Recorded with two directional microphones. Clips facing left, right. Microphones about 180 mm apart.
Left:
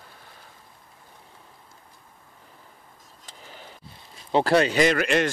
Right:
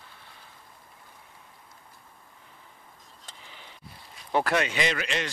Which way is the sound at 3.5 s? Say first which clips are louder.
Left 9 dB; 40° left (ahead or behind).